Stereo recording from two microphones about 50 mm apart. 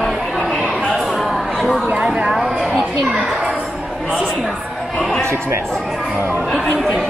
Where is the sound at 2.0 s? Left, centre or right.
Centre.